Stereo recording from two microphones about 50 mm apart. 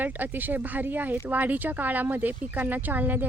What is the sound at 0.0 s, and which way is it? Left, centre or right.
Speech, right.